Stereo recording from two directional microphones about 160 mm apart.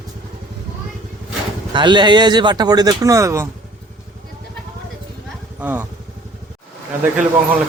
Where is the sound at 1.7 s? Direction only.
30° right (ahead or behind).